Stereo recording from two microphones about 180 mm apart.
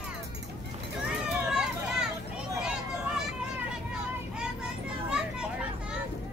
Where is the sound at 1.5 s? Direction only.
5° right (ahead or behind).